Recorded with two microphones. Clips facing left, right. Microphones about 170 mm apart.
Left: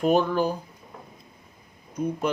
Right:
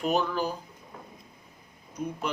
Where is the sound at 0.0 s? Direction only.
45° left (ahead or behind).